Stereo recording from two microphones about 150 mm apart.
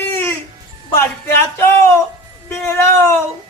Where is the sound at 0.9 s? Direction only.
15° left (ahead or behind).